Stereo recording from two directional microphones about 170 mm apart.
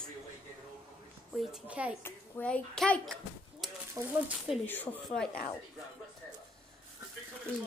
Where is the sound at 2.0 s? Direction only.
10° left (ahead or behind).